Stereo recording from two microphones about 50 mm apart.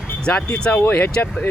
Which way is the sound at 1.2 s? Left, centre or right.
Left.